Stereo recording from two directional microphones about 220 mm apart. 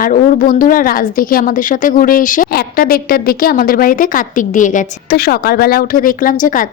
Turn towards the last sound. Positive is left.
turn(degrees=40)  # may be behind; listen again after turning